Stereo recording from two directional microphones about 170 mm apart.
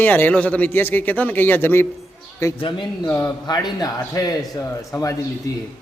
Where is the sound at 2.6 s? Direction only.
30° left (ahead or behind).